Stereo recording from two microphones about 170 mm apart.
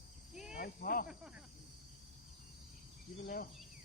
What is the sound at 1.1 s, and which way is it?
Speech, 5° right (ahead or behind).